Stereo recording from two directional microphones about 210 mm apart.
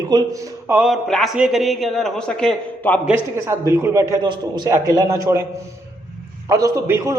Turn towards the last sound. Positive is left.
turn(degrees=-15)  # may be behind; listen again after turning